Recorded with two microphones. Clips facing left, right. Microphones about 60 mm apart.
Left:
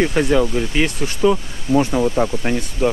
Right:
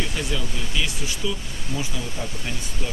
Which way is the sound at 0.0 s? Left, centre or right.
Left.